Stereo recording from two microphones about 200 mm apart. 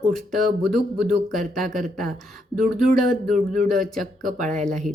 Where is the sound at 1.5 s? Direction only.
Centre (ahead or behind).